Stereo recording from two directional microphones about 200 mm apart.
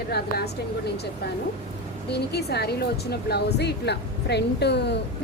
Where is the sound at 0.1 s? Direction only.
55° left (ahead or behind).